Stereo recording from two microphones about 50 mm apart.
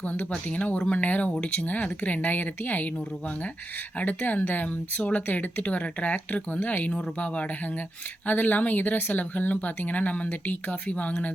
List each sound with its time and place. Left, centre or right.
0.0 s speech: left
3.9 s speech: left